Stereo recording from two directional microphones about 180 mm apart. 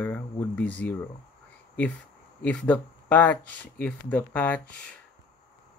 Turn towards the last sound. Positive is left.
turn(degrees=5)  # may be behind; listen again after turning